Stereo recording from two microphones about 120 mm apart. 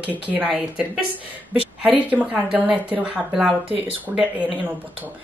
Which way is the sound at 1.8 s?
15° right (ahead or behind).